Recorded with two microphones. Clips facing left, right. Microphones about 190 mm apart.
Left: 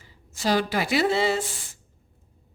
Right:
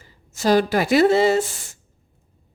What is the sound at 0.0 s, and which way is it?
Speech, 45° right (ahead or behind).